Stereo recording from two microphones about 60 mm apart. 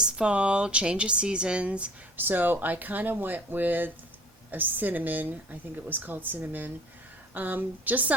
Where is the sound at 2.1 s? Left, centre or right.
Right.